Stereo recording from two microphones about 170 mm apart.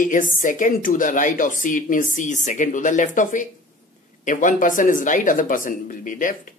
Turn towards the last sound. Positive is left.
turn(degrees=50)  # may be behind; listen again after turning